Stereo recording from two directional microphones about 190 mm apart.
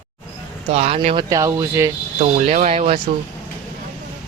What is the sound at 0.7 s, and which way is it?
Speech, 35° right (ahead or behind).